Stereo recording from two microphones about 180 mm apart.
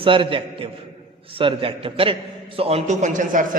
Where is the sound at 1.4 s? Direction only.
30° right (ahead or behind); by 3.4 s 45° right (ahead or behind).